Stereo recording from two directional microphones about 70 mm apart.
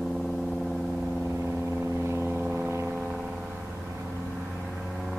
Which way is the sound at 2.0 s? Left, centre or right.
Right.